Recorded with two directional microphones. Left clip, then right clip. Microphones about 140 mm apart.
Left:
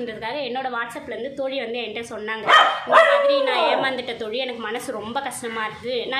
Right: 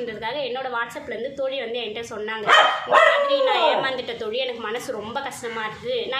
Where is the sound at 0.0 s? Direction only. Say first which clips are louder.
Even; 25° left (ahead or behind).